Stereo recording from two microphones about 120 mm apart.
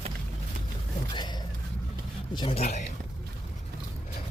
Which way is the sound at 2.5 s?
70° left (ahead or behind).